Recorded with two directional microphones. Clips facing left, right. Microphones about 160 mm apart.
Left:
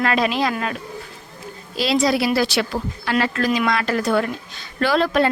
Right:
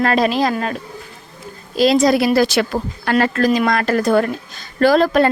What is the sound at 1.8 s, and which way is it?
A woman's voice, 45° right (ahead or behind).